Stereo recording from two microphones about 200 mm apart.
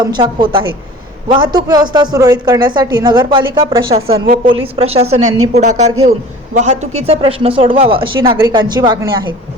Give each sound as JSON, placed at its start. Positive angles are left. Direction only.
{"t": 0.0, "sound": "a man's voice", "side_deg": -25}